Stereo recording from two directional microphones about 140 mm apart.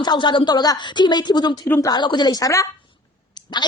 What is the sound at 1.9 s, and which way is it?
Speech, 30° left (ahead or behind).